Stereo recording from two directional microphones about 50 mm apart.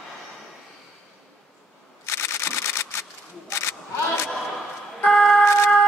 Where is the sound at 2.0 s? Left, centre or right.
Left.